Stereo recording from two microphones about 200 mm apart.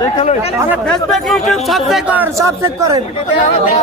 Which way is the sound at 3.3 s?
40° left (ahead or behind).